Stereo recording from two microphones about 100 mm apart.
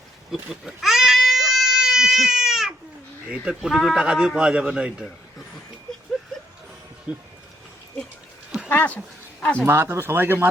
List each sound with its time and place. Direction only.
0.3 s baby cry: 5° right (ahead or behind)
3.2 s speech: 10° right (ahead or behind)
8.7 s speech: 15° left (ahead or behind)
9.6 s speech: 25° right (ahead or behind)